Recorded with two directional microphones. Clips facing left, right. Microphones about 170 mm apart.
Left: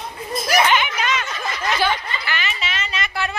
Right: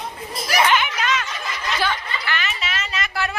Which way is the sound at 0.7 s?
Centre (ahead or behind).